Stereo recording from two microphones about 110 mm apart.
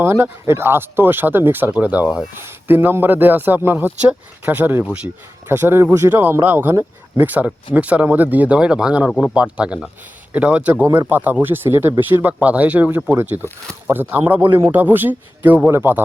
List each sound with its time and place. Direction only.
0.0 s speech: 25° right (ahead or behind)
9.0 s speech: 5° left (ahead or behind)
9.3 s speech: 10° right (ahead or behind)